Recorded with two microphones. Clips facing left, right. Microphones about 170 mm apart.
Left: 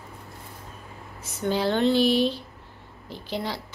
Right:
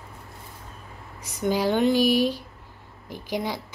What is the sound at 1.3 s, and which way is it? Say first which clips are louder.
Speech: right 1 dB; 10° right (ahead or behind).